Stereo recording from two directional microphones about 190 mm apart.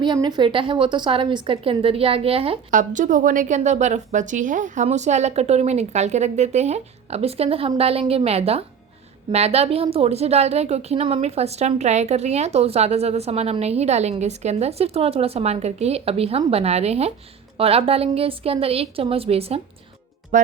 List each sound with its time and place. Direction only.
0.0 s a woman's voice: 25° right (ahead or behind)
2.6 s a woman's voice: 45° right (ahead or behind)
20.3 s speech: 45° right (ahead or behind)